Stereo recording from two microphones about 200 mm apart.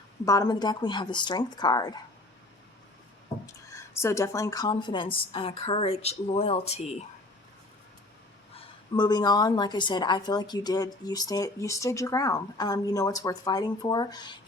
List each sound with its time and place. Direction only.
0.3 s a woman's voice: 20° left (ahead or behind)
3.7 s a woman's voice: 15° left (ahead or behind); by 6.9 s 30° left (ahead or behind)
8.5 s a woman's voice: 20° left (ahead or behind)